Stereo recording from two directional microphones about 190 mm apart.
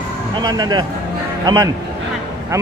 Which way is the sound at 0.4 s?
20° right (ahead or behind).